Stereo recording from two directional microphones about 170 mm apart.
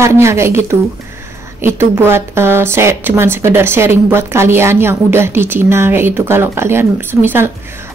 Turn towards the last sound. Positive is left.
turn(degrees=-10)  # may be behind; listen again after turning